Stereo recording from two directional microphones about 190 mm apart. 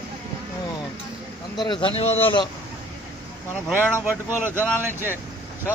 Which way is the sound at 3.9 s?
10° right (ahead or behind).